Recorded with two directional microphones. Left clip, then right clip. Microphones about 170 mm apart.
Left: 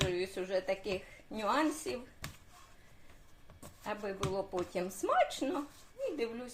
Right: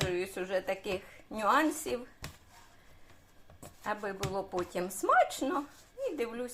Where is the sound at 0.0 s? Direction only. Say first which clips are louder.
Right 1 dB; 20° right (ahead or behind).